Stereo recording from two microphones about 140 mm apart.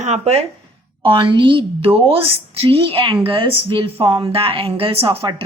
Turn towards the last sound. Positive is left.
turn(degrees=-45)  # may be behind; listen again after turning